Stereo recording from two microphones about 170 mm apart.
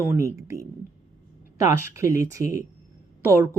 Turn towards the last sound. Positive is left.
turn(degrees=-15)  # may be behind; listen again after turning